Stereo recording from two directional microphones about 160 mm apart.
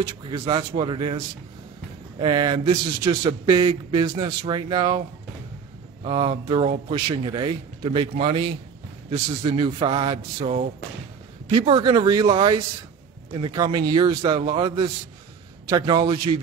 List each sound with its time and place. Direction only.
0.2 s a man's voice: 30° right (ahead or behind)
6.0 s a man's voice: 35° right (ahead or behind)